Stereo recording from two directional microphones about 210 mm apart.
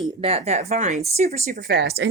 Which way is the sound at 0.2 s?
30° right (ahead or behind).